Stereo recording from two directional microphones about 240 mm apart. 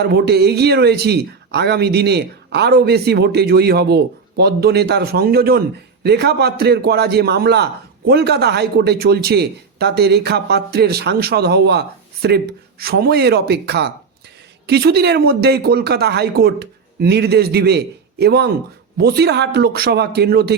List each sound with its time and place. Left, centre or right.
0.0 s speech: right